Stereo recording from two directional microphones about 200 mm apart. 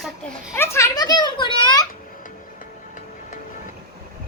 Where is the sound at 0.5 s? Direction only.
10° left (ahead or behind).